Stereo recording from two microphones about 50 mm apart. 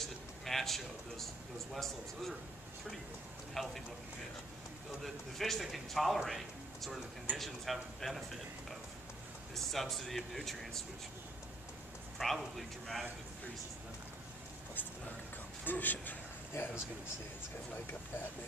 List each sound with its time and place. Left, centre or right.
0.5 s a man's voice: centre
3.6 s a man's voice: centre
5.0 s a man's voice: centre
9.7 s a man's voice: centre
12.2 s a man's voice: centre
15.6 s speech: left